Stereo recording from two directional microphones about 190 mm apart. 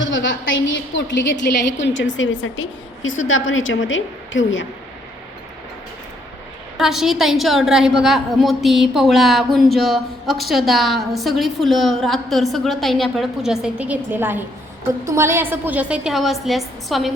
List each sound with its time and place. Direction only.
0.0 s a woman's voice: 75° left (ahead or behind)
6.7 s a woman's voice: centre (ahead or behind)